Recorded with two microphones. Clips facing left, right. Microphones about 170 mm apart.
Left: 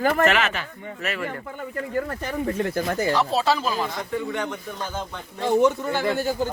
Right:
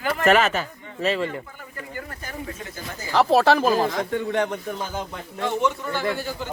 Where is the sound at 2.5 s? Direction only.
60° left (ahead or behind).